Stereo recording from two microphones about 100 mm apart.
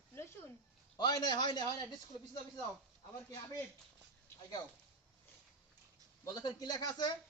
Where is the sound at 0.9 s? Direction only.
45° left (ahead or behind).